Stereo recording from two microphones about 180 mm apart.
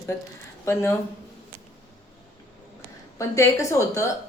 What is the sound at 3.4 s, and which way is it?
Speech, 15° left (ahead or behind).